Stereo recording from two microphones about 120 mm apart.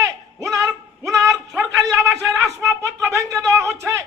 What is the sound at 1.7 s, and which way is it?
Speech, 25° right (ahead or behind).